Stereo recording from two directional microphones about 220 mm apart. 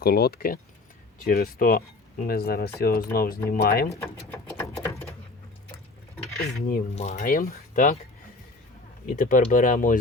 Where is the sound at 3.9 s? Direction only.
10° left (ahead or behind).